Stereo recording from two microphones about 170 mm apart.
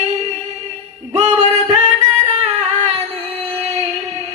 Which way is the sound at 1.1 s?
40° right (ahead or behind).